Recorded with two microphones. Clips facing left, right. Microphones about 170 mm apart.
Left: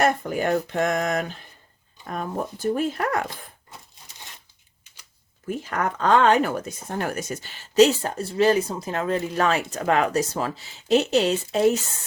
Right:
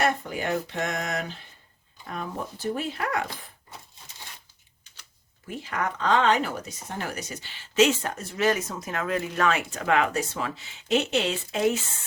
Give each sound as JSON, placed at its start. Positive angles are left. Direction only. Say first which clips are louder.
{"t": 0.0, "sound": "speech", "louder": "left 4 dB", "side_deg": 45}
{"t": 5.5, "sound": "speech", "louder": "left 4 dB", "side_deg": 45}